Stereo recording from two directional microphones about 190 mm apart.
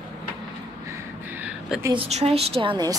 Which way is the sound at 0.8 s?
10° right (ahead or behind).